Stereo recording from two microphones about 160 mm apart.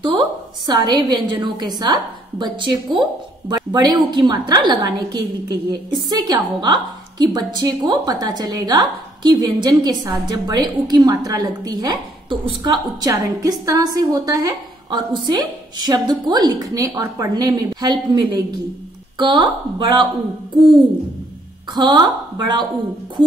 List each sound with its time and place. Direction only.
0.7 s a woman's voice: 30° right (ahead or behind)
21.7 s a woman's voice: 25° right (ahead or behind)